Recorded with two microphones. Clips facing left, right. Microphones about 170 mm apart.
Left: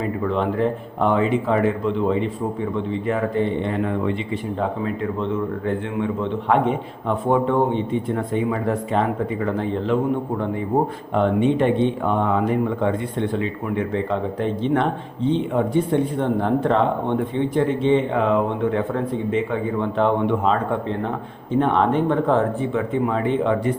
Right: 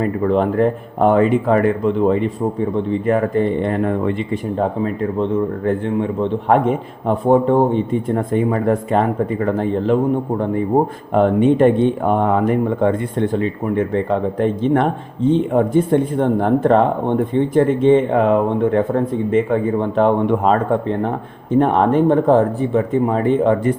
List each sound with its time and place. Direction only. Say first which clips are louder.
0.0 s speech: right 6 dB; 50° right (ahead or behind)
5.6 s a man's voice: right 5 dB; 40° right (ahead or behind)
10.7 s speech: right 4 dB; 15° right (ahead or behind)
11.1 s speech: right 5 dB; 45° right (ahead or behind)
21.6 s speech: right 4 dB; 45° right (ahead or behind)